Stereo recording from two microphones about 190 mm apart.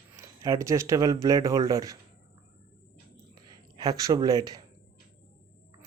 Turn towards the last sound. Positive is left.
turn(degrees=-20)  # may be behind; listen again after turning